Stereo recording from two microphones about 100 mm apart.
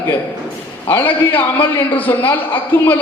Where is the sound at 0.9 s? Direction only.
20° left (ahead or behind).